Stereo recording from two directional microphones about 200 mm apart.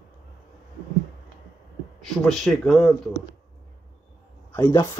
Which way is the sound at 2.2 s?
Centre (ahead or behind).